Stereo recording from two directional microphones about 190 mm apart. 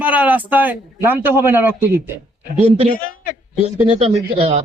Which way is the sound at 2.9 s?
45° left (ahead or behind).